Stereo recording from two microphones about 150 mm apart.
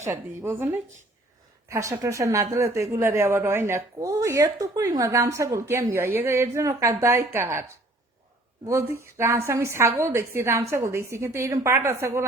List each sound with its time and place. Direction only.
0.0 s a woman's voice: 15° right (ahead or behind)
8.6 s a woman's voice: 20° right (ahead or behind)